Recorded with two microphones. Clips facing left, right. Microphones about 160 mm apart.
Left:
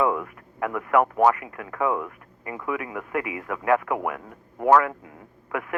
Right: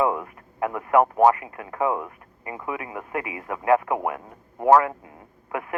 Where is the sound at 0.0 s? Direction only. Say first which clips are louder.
Even; 30° right (ahead or behind).